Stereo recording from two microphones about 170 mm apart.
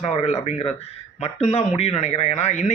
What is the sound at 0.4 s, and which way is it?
Speech, 40° left (ahead or behind).